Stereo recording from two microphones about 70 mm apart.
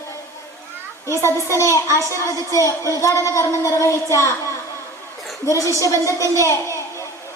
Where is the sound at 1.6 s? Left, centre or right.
Left.